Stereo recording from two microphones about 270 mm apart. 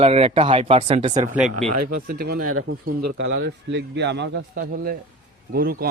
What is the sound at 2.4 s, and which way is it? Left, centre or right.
Speech, right.